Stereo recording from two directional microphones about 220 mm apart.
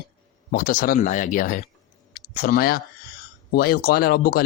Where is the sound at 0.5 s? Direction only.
40° left (ahead or behind).